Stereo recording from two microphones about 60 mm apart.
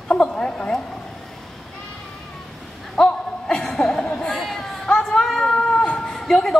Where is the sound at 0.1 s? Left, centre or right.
Centre.